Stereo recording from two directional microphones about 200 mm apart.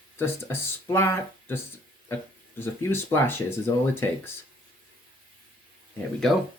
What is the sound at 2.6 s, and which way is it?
Speech, 10° left (ahead or behind).